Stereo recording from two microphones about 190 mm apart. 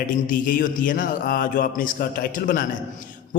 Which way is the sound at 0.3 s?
45° left (ahead or behind).